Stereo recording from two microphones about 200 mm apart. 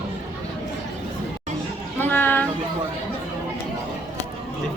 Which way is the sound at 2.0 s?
10° left (ahead or behind).